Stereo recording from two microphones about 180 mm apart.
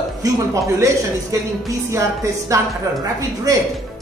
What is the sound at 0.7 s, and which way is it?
Speech, 15° right (ahead or behind).